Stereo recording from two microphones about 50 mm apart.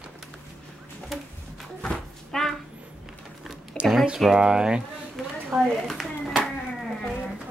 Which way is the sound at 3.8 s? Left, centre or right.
Left.